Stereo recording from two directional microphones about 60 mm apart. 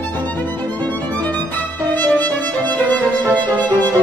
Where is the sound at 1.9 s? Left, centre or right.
Left.